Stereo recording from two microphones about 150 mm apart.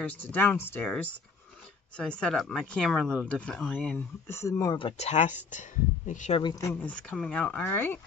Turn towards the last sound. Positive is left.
turn(degrees=15)  # may be behind; listen again after turning